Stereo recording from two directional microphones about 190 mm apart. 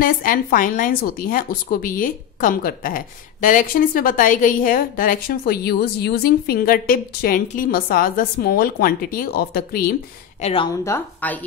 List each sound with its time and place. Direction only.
0.0 s speech: 50° left (ahead or behind)
10.4 s speech: 25° left (ahead or behind)
10.8 s a woman's voice: 10° left (ahead or behind)